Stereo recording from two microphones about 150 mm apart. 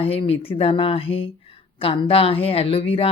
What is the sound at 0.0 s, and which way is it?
Speech, 40° left (ahead or behind).